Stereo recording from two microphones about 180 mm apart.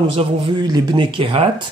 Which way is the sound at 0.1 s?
25° right (ahead or behind).